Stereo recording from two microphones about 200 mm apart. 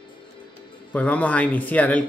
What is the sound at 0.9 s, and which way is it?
Speech, 5° left (ahead or behind).